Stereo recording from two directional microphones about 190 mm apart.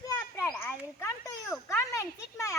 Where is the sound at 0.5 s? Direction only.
10° left (ahead or behind).